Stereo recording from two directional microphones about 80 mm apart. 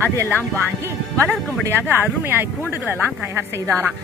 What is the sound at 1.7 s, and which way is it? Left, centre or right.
Speech, right.